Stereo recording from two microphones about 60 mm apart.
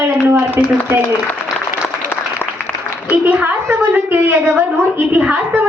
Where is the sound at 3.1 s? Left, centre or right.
Right.